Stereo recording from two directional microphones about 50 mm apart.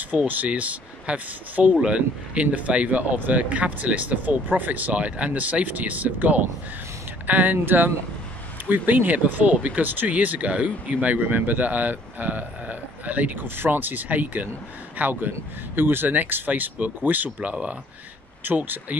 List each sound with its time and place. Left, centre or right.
0.3 s speech: right